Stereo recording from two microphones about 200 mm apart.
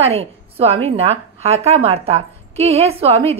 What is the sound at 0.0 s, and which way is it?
A woman's voice, 30° right (ahead or behind).